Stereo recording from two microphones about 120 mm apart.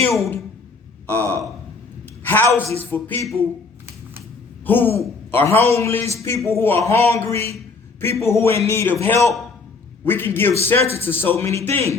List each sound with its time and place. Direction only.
0.1 s a man's voice: 25° left (ahead or behind)
4.6 s a man's voice: 15° left (ahead or behind)